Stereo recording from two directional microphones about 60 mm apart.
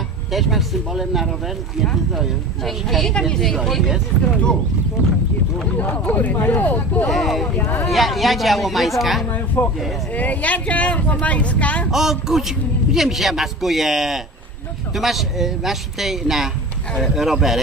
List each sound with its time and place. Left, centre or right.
0.3 s a man's voice: centre
5.7 s speech: left
7.1 s a man's voice: centre
7.6 s speech: left
7.9 s a man's voice: centre
9.6 s speech: left
10.2 s speech: left
11.9 s a man's voice: centre